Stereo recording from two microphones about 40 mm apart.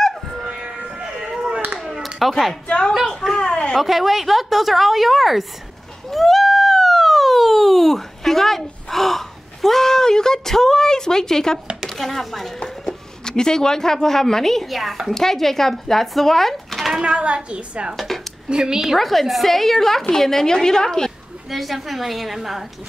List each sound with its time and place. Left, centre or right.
2.1 s a woman's voice: centre
3.3 s a sound: centre
3.7 s a woman's voice: centre
6.1 s a sound: centre
12.0 s a woman's voice: centre
12.8 s speech: centre
17.0 s a woman's voice: right
17.9 s dishes: centre
18.5 s a woman's voice: centre
18.9 s a woman's voice: centre
21.5 s a woman's voice: centre